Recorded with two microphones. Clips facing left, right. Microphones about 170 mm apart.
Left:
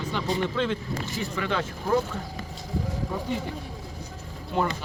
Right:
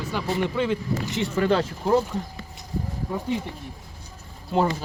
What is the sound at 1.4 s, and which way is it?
Speech, 40° right (ahead or behind).